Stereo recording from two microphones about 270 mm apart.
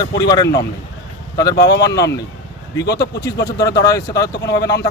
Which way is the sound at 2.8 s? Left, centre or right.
Left.